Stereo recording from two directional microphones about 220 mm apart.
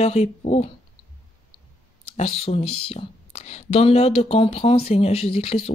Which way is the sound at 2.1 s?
25° left (ahead or behind).